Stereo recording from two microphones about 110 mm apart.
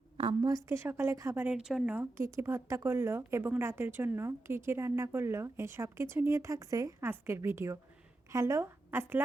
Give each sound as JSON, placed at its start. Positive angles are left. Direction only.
{"t": 0.7, "sound": "a woman's voice", "side_deg": -20}
{"t": 1.5, "sound": "a woman's voice", "side_deg": -5}
{"t": 2.0, "sound": "a woman's voice", "side_deg": -25}